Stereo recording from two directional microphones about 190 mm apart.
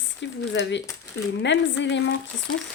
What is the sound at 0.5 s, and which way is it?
Speech, 70° left (ahead or behind).